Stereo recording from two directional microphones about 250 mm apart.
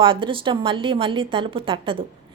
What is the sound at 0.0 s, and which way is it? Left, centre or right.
A woman's voice, right.